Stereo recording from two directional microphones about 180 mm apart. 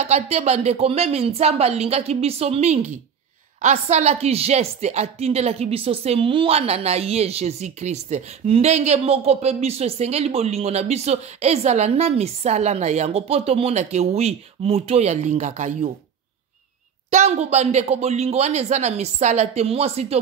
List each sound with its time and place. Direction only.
0.0 s a woman's voice: 35° right (ahead or behind)
17.1 s a woman's voice: 35° right (ahead or behind)